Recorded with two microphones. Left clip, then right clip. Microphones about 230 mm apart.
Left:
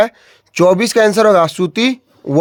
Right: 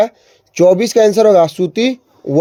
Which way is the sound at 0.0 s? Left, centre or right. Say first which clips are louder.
Even; left.